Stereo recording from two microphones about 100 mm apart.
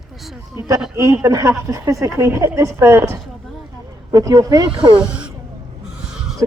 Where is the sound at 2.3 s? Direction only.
20° right (ahead or behind).